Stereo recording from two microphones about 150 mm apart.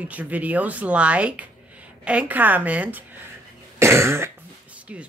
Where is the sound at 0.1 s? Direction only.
10° right (ahead or behind).